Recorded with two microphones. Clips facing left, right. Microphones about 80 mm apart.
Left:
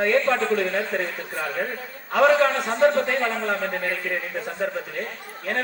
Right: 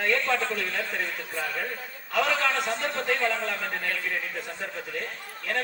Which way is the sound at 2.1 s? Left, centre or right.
Left.